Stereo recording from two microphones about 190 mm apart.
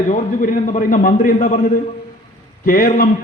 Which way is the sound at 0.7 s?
45° left (ahead or behind).